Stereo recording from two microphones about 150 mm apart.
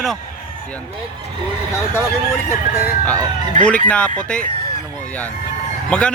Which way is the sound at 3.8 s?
5° left (ahead or behind).